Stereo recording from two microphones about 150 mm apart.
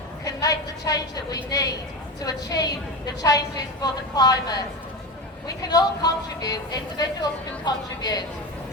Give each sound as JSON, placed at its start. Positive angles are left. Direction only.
{"t": 0.3, "sound": "a woman's voice", "side_deg": 25}